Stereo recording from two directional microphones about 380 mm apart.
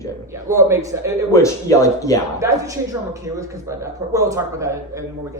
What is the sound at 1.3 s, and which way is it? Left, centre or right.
Speech, centre.